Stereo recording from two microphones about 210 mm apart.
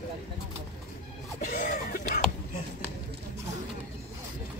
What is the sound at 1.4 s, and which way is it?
Music, 40° left (ahead or behind).